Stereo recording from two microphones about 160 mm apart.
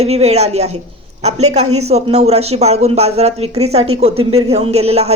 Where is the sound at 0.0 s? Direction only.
40° right (ahead or behind).